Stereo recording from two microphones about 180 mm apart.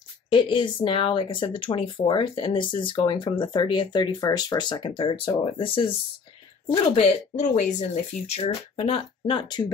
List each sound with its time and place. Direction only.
0.3 s speech: 25° left (ahead or behind)